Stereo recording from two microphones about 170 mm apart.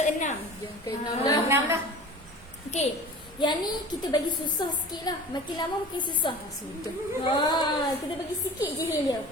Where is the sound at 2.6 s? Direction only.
40° left (ahead or behind).